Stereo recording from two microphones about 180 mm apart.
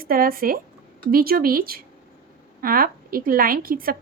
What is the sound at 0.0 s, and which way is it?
Speech, 55° right (ahead or behind).